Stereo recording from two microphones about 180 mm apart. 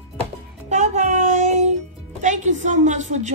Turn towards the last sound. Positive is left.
turn(degrees=-40)  # may be behind; listen again after turning